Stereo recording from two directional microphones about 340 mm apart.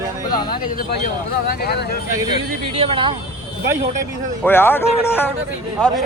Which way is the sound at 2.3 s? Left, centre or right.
Centre.